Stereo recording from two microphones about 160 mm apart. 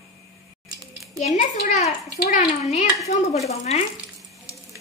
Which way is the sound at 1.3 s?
50° left (ahead or behind).